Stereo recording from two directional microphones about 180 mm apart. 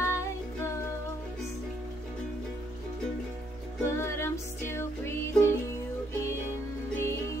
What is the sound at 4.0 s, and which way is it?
Music, 15° left (ahead or behind).